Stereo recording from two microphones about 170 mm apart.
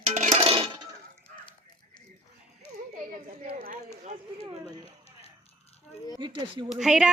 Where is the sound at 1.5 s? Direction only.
25° left (ahead or behind).